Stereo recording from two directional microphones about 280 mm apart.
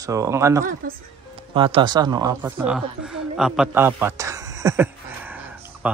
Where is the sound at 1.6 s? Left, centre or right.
Centre.